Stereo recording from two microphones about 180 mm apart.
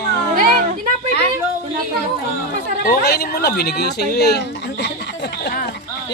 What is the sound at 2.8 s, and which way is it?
Speech, 60° left (ahead or behind).